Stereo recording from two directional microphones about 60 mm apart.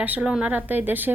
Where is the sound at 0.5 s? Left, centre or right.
Right.